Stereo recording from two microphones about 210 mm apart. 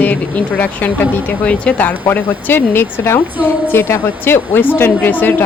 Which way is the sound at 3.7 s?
10° left (ahead or behind).